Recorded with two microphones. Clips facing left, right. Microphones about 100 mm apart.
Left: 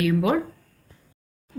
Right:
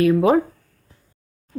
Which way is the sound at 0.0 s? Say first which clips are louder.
Right 6 dB; 35° right (ahead or behind).